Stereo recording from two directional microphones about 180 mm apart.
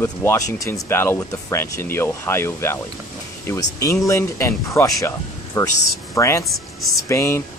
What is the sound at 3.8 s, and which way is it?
Speech, 15° left (ahead or behind).